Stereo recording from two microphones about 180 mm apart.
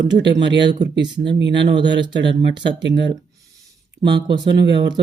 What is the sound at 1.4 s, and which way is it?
Speech, 75° right (ahead or behind).